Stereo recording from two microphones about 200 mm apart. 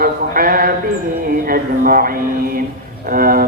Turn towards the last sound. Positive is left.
turn(degrees=-45)  # may be behind; listen again after turning